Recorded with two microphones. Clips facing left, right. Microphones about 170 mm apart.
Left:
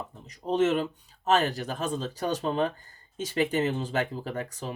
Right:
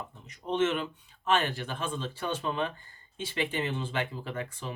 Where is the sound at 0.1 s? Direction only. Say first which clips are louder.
Left 4 dB; 35° left (ahead or behind).